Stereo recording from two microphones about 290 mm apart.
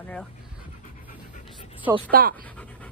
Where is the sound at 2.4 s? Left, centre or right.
Centre.